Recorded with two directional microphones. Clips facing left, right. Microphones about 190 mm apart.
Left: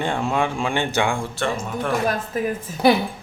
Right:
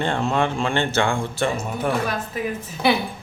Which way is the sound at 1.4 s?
5° right (ahead or behind).